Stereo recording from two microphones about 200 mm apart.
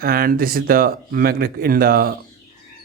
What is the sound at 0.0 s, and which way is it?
Speech, 45° right (ahead or behind).